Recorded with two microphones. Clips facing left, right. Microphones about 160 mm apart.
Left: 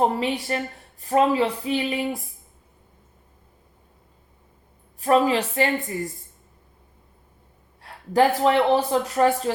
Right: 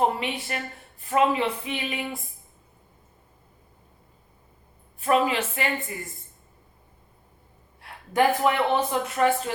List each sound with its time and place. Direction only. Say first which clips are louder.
0.0 s speech: left 3 dB; 35° left (ahead or behind)
4.9 s speech: left 3 dB; 35° left (ahead or behind)
7.8 s speech: left 3 dB; 35° left (ahead or behind)